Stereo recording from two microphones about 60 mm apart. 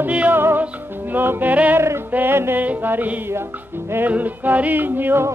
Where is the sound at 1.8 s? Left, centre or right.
Right.